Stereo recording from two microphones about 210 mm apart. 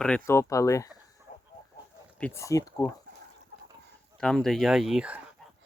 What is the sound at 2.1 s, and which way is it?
Speech, 10° left (ahead or behind).